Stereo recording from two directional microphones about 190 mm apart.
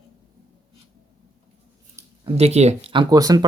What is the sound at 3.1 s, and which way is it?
Speech, 20° right (ahead or behind).